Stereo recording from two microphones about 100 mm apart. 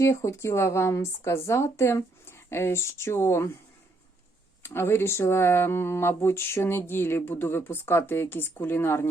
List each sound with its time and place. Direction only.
0.0 s speech: 30° left (ahead or behind)
4.6 s speech: 25° left (ahead or behind)